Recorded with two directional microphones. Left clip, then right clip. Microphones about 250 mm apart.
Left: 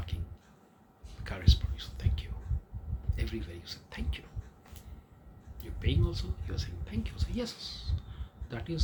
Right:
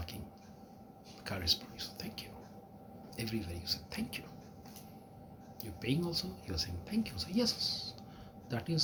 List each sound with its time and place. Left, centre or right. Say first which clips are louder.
1.2 s a sound: right 2 dB; centre
3.2 s speech: right 1 dB; centre
5.8 s speech: right 1 dB; centre